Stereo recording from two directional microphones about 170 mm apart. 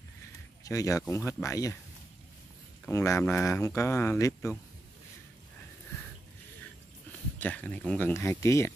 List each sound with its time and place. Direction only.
0.7 s speech: 20° left (ahead or behind)
2.9 s speech: 15° left (ahead or behind)
7.3 s speech: 10° left (ahead or behind)